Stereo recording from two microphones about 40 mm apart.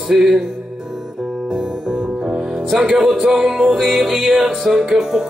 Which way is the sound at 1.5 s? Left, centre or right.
Right.